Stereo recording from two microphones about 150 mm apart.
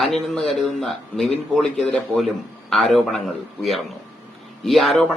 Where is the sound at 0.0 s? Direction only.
Centre (ahead or behind).